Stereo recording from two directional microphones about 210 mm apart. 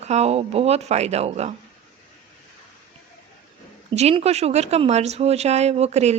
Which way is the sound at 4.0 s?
30° right (ahead or behind).